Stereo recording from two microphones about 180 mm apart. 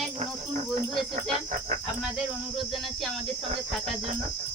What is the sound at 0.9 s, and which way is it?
Speech, centre (ahead or behind).